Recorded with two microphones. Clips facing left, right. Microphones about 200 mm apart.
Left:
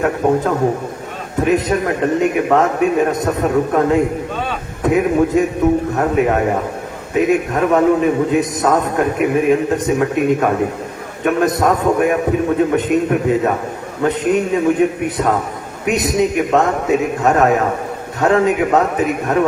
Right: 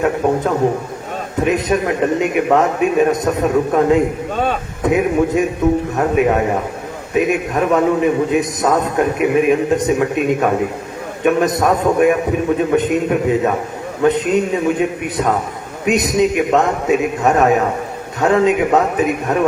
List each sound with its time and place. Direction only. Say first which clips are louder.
1.5 s a man's voice: left 1 dB; 20° right (ahead or behind)